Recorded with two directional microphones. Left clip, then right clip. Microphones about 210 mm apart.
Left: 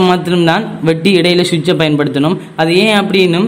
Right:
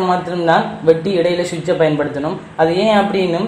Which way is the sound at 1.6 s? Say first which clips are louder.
Left 2 dB; 65° left (ahead or behind).